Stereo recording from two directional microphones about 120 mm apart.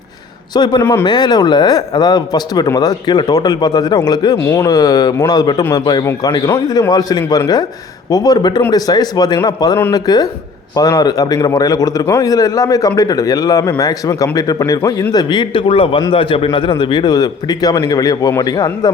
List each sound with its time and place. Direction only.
0.5 s a man's voice: 35° left (ahead or behind)
4.4 s a man's voice: 25° left (ahead or behind)